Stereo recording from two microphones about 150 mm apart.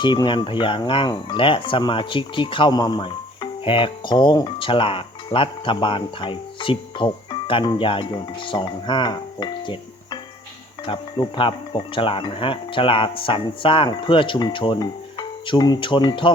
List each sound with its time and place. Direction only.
0.0 s speech: 30° left (ahead or behind)